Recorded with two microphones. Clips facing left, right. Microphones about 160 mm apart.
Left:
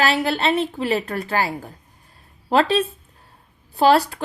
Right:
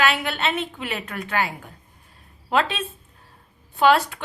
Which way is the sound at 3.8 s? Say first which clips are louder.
Left 2 dB; 35° left (ahead or behind).